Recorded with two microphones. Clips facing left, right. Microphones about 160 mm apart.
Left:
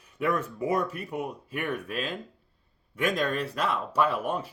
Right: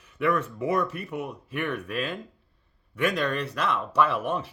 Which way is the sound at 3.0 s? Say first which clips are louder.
Right 1 dB; 40° left (ahead or behind).